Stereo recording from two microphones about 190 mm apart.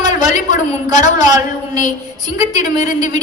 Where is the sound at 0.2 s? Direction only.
20° right (ahead or behind).